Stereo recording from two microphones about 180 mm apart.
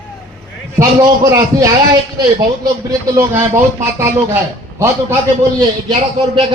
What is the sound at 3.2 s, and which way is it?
Speech, 15° right (ahead or behind).